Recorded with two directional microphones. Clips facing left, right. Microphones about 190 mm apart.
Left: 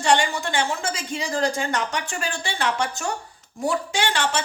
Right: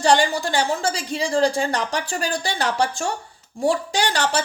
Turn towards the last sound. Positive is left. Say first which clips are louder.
# right 2 dB
turn(degrees=-40)  # may be behind; listen again after turning